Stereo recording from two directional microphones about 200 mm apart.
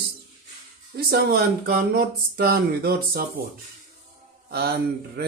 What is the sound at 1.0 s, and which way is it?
Speech, 50° right (ahead or behind).